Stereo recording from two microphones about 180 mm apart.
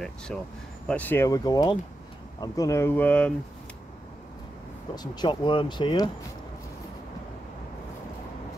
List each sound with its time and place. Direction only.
0.3 s speech: 5° left (ahead or behind)
4.9 s speech: 25° left (ahead or behind)